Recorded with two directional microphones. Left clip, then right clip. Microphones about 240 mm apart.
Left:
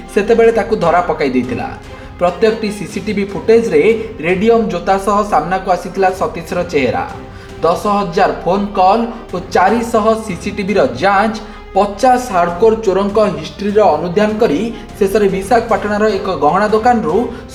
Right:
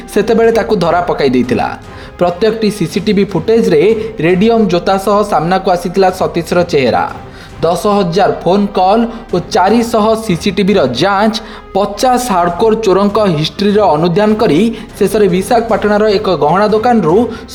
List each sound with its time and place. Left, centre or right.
0.1 s speech: right